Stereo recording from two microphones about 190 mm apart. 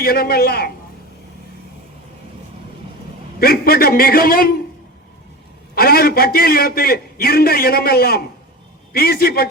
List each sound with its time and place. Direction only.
0.0 s a man's voice: 55° left (ahead or behind)
3.4 s a man's voice: 55° left (ahead or behind)
5.7 s a man's voice: 55° left (ahead or behind)